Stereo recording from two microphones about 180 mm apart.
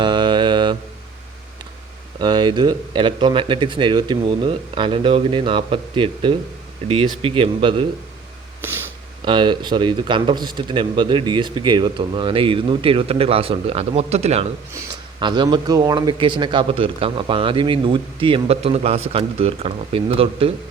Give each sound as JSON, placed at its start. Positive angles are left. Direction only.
{"t": 0.0, "sound": "mantra", "side_deg": -25}
{"t": 2.2, "sound": "speech", "side_deg": -25}
{"t": 9.2, "sound": "speech", "side_deg": -25}
{"t": 15.2, "sound": "speech", "side_deg": -25}